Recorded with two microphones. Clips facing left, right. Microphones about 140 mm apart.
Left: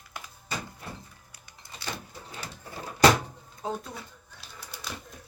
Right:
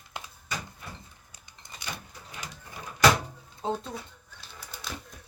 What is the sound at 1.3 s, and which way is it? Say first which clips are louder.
Vehicle: left 1 dB; 20° right (ahead or behind).